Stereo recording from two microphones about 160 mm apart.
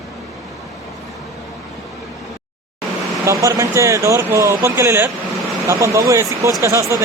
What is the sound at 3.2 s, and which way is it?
Speech, 20° right (ahead or behind).